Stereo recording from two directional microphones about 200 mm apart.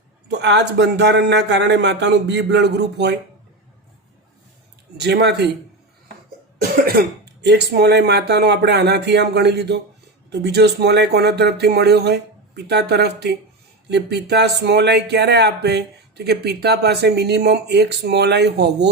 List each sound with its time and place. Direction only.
0.3 s speech: 60° right (ahead or behind)
4.9 s speech: 55° right (ahead or behind)
7.0 s speech: 50° right (ahead or behind)